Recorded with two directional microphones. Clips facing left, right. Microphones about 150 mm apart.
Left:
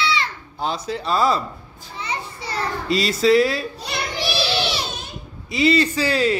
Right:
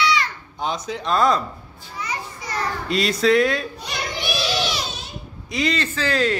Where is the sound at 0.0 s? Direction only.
25° left (ahead or behind).